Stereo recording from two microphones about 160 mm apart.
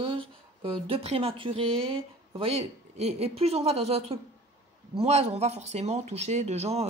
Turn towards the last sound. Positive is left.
turn(degrees=-40)  # may be behind; listen again after turning